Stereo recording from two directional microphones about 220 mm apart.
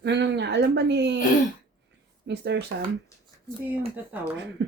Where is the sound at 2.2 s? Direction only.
50° right (ahead or behind).